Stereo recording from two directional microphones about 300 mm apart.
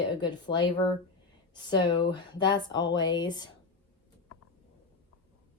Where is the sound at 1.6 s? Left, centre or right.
Centre.